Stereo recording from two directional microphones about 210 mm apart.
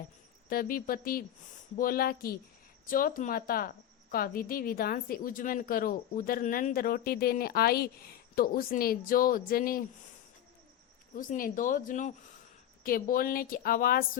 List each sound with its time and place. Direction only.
0.5 s a woman's voice: 45° left (ahead or behind)
11.1 s a woman's voice: 40° left (ahead or behind)